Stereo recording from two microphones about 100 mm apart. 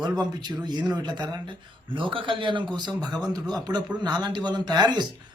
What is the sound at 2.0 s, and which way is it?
A man's voice, 55° right (ahead or behind).